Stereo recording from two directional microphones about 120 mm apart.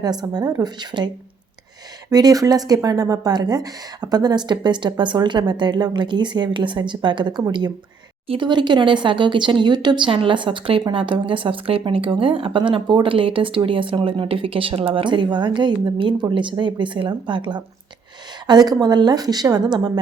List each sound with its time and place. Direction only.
0.0 s speech: 35° right (ahead or behind)